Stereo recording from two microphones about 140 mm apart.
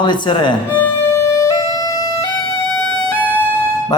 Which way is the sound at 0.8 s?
20° left (ahead or behind).